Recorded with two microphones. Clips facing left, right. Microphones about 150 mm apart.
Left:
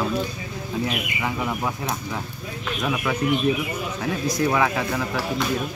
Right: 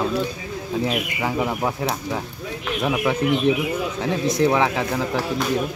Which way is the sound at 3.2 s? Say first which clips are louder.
Even; 90° right.